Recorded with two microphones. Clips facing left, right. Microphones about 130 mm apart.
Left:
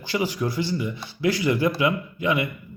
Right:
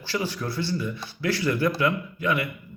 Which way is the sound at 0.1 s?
15° left (ahead or behind).